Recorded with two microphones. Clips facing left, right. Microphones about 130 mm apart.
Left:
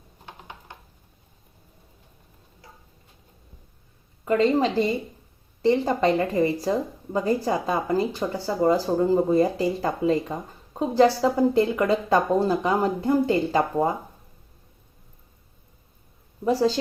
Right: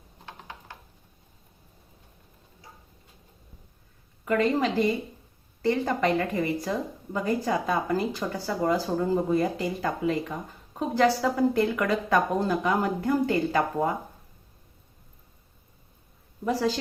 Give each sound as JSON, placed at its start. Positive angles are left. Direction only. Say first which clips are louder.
{"t": 0.3, "sound": "a sound", "louder": "left 1 dB", "side_deg": 20}
{"t": 4.3, "sound": "speech", "louder": "left 3 dB", "side_deg": 25}
{"t": 16.4, "sound": "speech", "louder": "left 5 dB", "side_deg": 30}